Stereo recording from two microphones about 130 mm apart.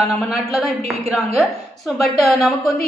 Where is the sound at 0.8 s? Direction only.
55° right (ahead or behind).